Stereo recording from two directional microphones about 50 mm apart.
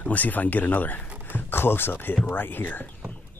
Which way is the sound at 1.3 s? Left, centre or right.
Left.